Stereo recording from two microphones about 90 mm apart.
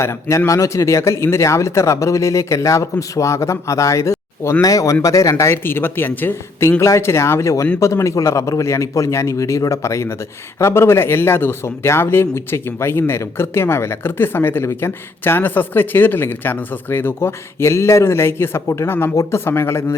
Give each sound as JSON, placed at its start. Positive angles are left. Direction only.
{"t": 0.0, "sound": "a man's voice", "side_deg": 35}